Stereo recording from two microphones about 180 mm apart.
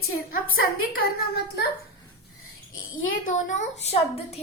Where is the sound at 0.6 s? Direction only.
55° left (ahead or behind).